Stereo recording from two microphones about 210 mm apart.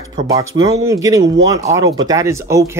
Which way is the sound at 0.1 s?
20° right (ahead or behind).